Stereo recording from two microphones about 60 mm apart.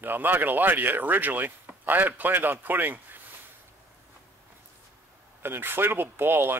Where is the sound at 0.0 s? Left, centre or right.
Right.